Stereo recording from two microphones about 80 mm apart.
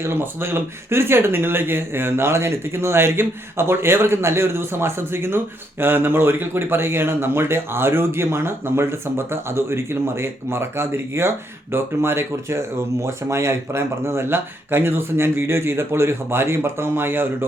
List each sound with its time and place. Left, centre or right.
0.0 s speech: right